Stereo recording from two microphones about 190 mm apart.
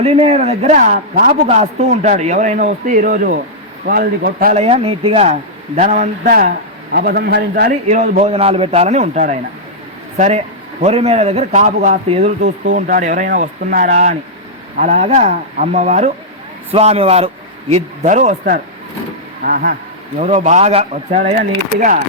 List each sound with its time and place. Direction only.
0.0 s a man's voice: 30° right (ahead or behind)
1.3 s a man's voice: 35° right (ahead or behind); by 4.5 s 50° right (ahead or behind)
4.5 s a man's voice: 30° right (ahead or behind)
6.9 s a man's voice: 55° right (ahead or behind)
7.9 s a man's voice: 35° right (ahead or behind)
20.1 s a man's voice: 35° right (ahead or behind)